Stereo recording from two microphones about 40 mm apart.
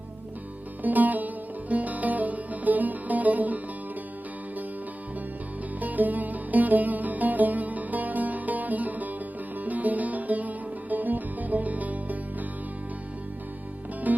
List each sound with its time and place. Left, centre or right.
0.8 s music: right
5.8 s music: right
14.1 s music: right